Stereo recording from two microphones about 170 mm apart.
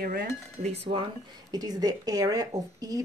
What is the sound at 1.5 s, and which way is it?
Speech, 20° right (ahead or behind).